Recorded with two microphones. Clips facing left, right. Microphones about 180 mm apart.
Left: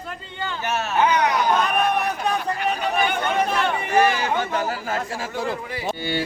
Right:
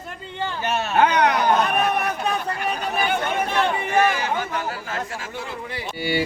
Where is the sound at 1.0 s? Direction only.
60° right (ahead or behind).